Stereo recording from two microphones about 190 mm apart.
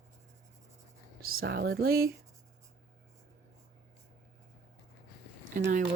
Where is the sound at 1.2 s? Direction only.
55° right (ahead or behind).